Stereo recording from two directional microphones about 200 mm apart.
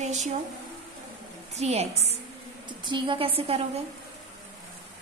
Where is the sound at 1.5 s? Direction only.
30° right (ahead or behind).